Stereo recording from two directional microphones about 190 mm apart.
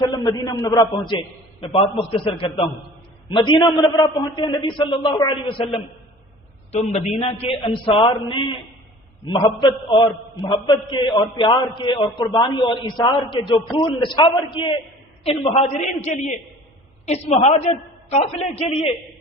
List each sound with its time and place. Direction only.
0.1 s a man's voice: 20° left (ahead or behind)
1.6 s a man's voice: 30° left (ahead or behind)